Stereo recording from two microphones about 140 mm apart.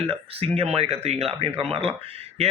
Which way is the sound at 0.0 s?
45° right (ahead or behind).